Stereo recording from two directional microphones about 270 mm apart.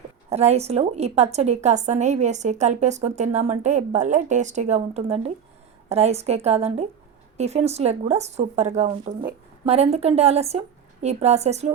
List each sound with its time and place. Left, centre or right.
0.3 s a woman's voice: right